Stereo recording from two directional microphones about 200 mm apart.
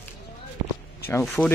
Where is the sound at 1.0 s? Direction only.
10° left (ahead or behind).